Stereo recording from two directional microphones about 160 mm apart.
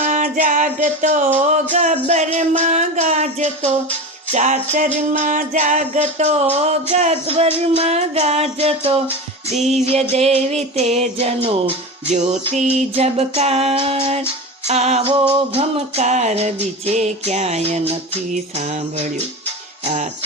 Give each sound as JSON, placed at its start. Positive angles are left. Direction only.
{"t": 0.0, "sound": "music", "side_deg": -50}